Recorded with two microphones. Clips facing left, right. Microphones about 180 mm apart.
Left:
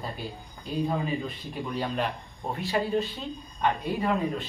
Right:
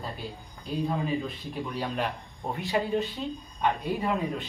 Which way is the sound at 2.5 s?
15° right (ahead or behind).